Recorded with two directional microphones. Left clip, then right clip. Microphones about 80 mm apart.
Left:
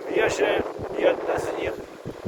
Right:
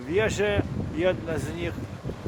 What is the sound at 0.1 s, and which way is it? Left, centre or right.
Speech, left.